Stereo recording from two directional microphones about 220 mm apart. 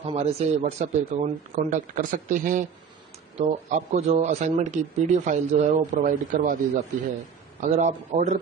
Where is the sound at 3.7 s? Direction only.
30° right (ahead or behind).